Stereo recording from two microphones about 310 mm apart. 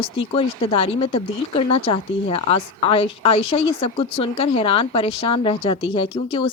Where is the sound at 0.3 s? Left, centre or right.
Centre.